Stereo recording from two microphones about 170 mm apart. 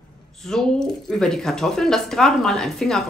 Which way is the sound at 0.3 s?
Centre (ahead or behind).